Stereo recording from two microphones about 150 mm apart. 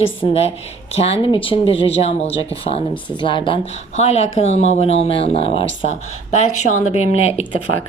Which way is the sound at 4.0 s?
45° left (ahead or behind).